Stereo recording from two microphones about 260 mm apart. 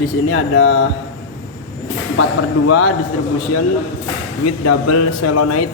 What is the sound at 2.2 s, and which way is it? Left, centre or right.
Speech, left.